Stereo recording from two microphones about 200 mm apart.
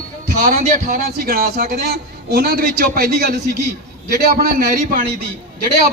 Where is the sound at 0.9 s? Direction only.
50° right (ahead or behind).